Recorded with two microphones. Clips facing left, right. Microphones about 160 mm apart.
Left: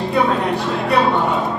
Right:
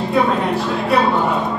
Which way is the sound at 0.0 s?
Centre (ahead or behind).